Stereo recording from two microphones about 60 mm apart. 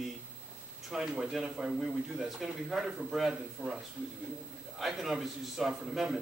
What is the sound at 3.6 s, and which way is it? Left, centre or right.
Speech, right.